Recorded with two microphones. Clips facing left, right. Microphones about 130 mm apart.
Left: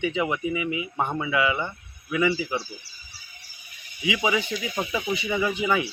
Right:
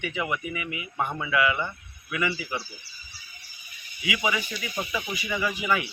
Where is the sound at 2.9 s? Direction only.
35° left (ahead or behind).